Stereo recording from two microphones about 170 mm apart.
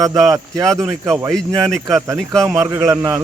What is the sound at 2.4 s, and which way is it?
Speech, 15° right (ahead or behind).